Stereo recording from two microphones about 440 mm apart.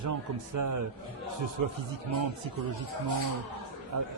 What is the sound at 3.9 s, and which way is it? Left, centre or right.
Speech, right.